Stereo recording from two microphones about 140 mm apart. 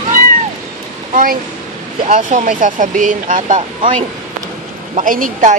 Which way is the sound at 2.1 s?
65° right (ahead or behind).